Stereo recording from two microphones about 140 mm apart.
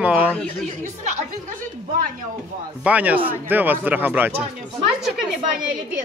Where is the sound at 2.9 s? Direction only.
10° right (ahead or behind).